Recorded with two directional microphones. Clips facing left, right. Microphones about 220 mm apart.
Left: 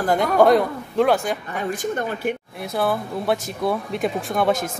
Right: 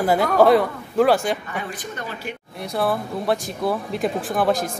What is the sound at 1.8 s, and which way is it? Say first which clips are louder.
Speech: left 8 dB; 50° left (ahead or behind).